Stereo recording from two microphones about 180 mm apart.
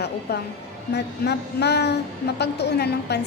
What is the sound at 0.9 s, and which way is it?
A woman's voice, 65° left (ahead or behind).